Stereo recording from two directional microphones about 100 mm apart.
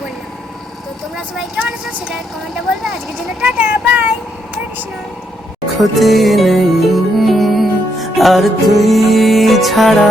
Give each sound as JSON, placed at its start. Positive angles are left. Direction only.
{"t": 1.5, "sound": "speech", "side_deg": -15}
{"t": 3.4, "sound": "speech", "side_deg": -15}
{"t": 5.6, "sound": "music", "side_deg": 0}